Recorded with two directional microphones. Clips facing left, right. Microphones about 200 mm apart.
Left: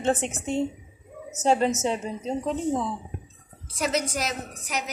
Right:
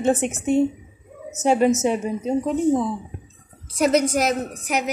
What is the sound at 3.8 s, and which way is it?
A woman's voice, 50° right (ahead or behind).